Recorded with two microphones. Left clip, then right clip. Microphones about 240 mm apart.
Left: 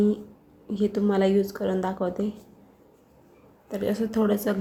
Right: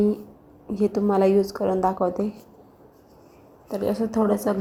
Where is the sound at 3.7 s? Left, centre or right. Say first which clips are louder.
Right 2 dB; centre.